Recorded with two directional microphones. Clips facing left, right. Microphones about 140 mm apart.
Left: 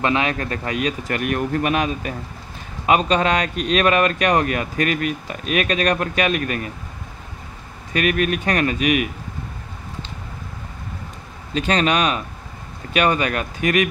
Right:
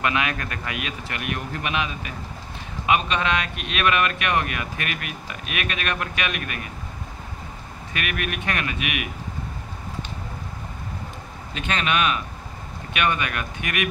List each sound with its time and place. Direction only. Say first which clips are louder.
0.0 s speech: left 4 dB; 30° left (ahead or behind)
7.9 s speech: left 9 dB; 35° left (ahead or behind)
11.5 s speech: left 6 dB; 35° left (ahead or behind)